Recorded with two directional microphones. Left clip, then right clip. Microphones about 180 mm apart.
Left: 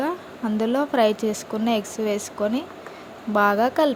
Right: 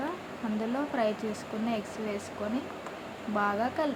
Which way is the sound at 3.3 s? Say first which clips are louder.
Left 10 dB; 55° left (ahead or behind).